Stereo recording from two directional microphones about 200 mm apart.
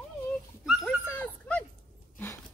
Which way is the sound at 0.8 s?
10° left (ahead or behind).